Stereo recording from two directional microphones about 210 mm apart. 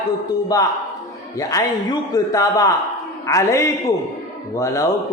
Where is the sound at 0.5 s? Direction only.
15° left (ahead or behind).